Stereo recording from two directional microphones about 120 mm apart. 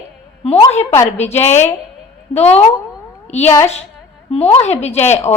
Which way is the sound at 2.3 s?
60° left (ahead or behind).